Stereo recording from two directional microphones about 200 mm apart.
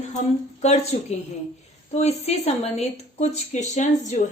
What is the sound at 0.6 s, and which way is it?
A woman's voice, 35° left (ahead or behind).